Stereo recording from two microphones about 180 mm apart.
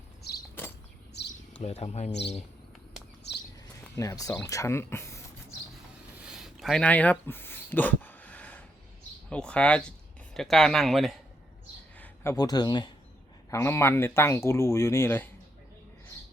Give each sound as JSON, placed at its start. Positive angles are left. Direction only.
{"t": 0.2, "sound": "a sound", "side_deg": 60}
{"t": 1.6, "sound": "speech", "side_deg": 35}
{"t": 3.9, "sound": "speech", "side_deg": 20}
{"t": 6.1, "sound": "a sound", "side_deg": -5}
{"t": 9.3, "sound": "a man's voice", "side_deg": 5}
{"t": 11.9, "sound": "speech", "side_deg": 10}